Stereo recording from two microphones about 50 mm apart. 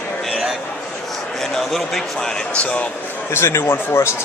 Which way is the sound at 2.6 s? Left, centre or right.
Left.